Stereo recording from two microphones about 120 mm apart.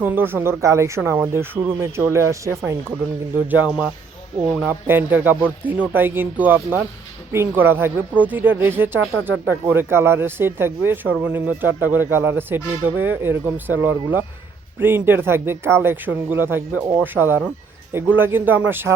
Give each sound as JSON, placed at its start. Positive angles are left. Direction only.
{"t": 0.0, "sound": "speech", "side_deg": -15}
{"t": 3.5, "sound": "speech", "side_deg": -10}